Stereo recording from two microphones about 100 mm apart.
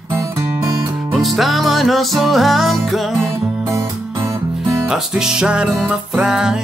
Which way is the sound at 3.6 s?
30° right (ahead or behind).